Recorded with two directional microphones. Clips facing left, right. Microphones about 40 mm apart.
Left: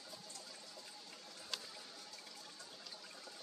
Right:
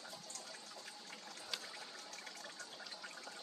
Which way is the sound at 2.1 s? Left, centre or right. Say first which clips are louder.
Right 4 dB; right.